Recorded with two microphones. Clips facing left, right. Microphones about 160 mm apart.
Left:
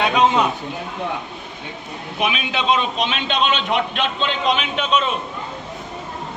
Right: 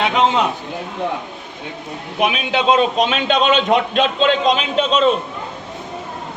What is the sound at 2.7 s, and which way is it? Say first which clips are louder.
A man's voice: right 6 dB; 45° right (ahead or behind).